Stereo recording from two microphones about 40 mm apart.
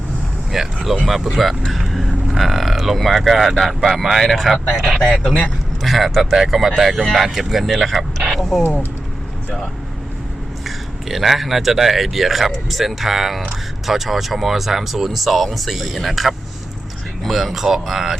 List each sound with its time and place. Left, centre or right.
0.5 s speech: centre
4.2 s speech: centre
4.9 s speech: centre
5.8 s speech: centre
11.1 s speech: centre